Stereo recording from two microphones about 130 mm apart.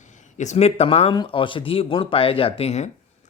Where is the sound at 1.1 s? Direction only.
35° left (ahead or behind); by 2.9 s 55° left (ahead or behind).